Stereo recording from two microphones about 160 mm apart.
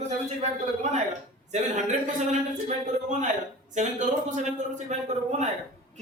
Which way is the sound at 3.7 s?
50° right (ahead or behind).